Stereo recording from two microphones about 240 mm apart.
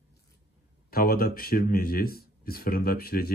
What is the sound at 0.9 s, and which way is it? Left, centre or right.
Speech, left.